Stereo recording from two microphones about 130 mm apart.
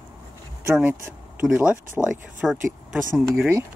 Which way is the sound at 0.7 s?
10° right (ahead or behind).